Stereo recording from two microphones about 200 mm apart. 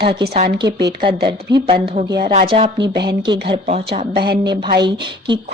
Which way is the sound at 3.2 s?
25° right (ahead or behind).